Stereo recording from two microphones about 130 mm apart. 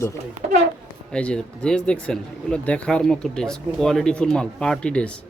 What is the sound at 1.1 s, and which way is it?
Speech, 5° left (ahead or behind).